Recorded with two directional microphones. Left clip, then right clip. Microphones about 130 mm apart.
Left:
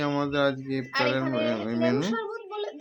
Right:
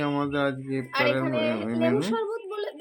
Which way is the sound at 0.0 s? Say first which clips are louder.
Left 1 dB; centre (ahead or behind).